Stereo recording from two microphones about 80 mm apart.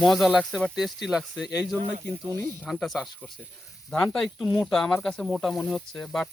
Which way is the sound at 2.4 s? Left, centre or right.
Centre.